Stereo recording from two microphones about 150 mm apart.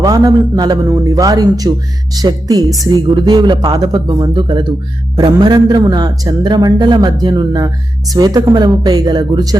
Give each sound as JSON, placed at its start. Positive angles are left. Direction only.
{"t": 0.0, "sound": "speech", "side_deg": -25}